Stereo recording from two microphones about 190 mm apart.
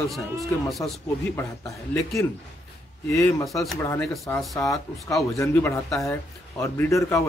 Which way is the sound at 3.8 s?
10° left (ahead or behind).